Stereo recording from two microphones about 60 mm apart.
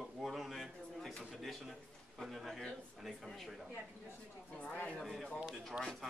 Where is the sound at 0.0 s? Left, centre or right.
Centre.